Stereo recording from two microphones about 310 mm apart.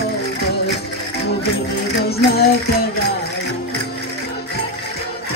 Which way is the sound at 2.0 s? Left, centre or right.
Left.